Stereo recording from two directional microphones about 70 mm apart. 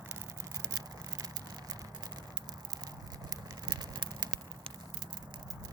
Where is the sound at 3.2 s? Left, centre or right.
Right.